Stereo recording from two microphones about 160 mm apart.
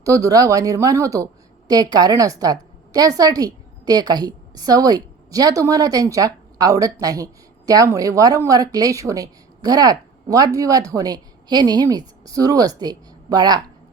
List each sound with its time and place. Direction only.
0.0 s a woman's voice: 20° right (ahead or behind)